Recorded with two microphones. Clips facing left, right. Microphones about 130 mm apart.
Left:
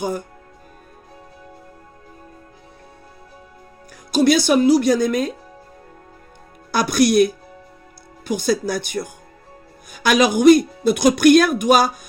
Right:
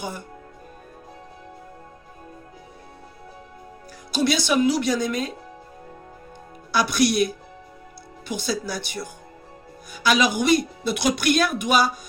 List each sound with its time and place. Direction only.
4.1 s speech: 45° left (ahead or behind)
6.7 s speech: 45° left (ahead or behind)
8.3 s speech: 50° left (ahead or behind)